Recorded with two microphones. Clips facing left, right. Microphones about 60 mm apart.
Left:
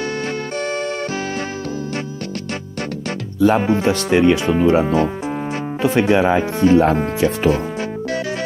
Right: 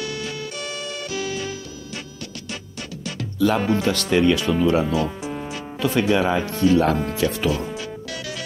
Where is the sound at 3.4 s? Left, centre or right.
Left.